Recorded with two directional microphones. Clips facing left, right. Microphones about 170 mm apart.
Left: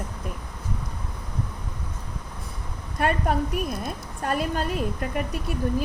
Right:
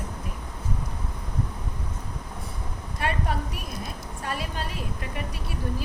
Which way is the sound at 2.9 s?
50° left (ahead or behind).